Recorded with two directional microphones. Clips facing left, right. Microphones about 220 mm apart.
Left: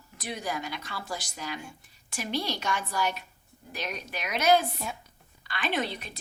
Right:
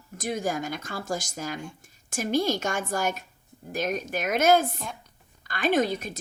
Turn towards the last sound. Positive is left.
turn(degrees=-45)  # may be behind; listen again after turning